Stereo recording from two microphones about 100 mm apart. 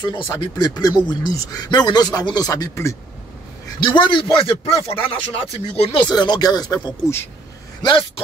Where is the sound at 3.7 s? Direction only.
55° left (ahead or behind).